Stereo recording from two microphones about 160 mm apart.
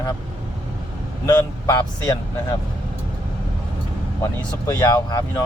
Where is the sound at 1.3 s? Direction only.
25° left (ahead or behind).